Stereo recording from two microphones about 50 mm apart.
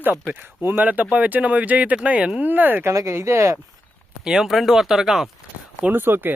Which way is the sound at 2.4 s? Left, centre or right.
Right.